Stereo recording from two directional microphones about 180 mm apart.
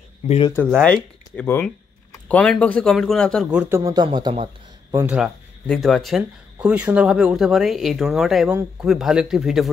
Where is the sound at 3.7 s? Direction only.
20° right (ahead or behind).